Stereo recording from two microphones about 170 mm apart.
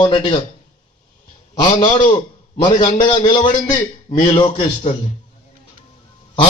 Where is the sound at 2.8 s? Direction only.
45° left (ahead or behind).